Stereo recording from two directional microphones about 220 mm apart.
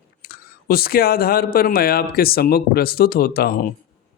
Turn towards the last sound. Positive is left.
turn(degrees=40)  # may be behind; listen again after turning